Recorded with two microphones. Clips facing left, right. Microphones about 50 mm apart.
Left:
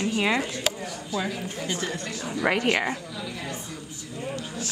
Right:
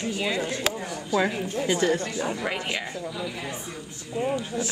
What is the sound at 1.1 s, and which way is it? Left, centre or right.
A woman's voice, right.